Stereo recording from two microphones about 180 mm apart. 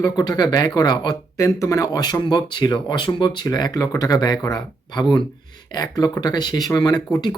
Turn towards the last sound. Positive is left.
turn(degrees=25)  # may be behind; listen again after turning